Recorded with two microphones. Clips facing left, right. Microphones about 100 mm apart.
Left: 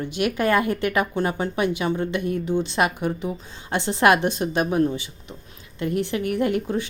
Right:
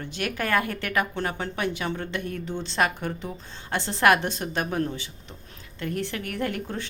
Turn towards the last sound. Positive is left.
turn(degrees=15)  # may be behind; listen again after turning